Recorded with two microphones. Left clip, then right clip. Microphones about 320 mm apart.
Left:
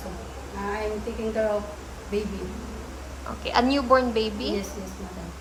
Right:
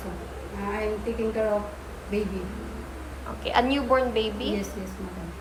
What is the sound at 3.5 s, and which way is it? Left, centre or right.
A woman's voice, centre.